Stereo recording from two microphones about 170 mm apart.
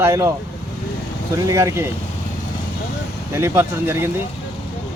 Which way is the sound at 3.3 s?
15° right (ahead or behind).